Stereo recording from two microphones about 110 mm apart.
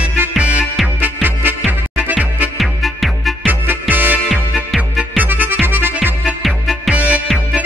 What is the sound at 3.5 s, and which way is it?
Music, 15° right (ahead or behind).